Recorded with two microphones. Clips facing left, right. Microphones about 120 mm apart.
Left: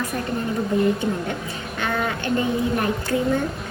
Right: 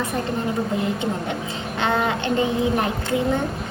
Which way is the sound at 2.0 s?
20° right (ahead or behind).